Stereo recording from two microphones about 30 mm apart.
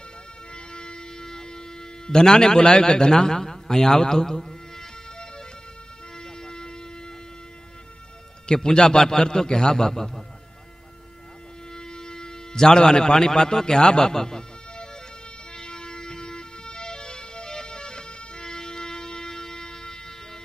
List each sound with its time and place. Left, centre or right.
0.5 s a sound: left
6.1 s music: left
8.6 s a man's voice: left
11.7 s a man's voice: left
15.5 s music: left